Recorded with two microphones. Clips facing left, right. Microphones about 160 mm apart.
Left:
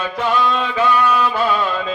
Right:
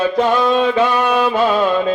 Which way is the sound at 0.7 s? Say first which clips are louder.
Right 2 dB; 40° right (ahead or behind).